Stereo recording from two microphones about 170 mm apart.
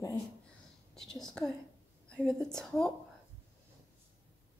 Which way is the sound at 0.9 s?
Centre (ahead or behind).